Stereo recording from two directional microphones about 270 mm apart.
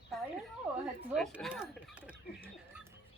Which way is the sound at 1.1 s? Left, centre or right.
Centre.